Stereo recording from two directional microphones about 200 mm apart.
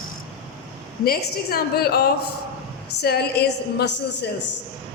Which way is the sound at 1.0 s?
50° left (ahead or behind).